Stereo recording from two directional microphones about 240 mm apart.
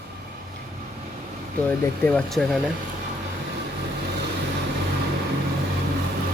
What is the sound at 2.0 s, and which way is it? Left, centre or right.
Speech, centre.